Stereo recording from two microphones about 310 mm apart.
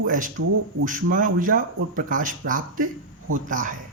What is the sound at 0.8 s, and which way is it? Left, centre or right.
Speech, right.